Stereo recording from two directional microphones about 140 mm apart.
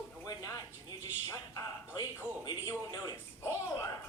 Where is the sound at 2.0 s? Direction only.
25° left (ahead or behind).